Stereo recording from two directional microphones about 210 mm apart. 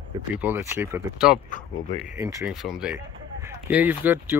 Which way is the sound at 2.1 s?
15° right (ahead or behind).